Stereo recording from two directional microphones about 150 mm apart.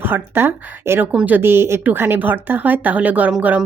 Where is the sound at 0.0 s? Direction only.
15° right (ahead or behind).